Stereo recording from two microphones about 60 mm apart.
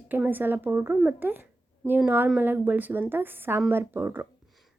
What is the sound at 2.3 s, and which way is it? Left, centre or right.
Speech, right.